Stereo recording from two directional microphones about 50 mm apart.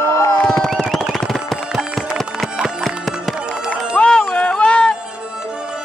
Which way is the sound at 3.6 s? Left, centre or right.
Left.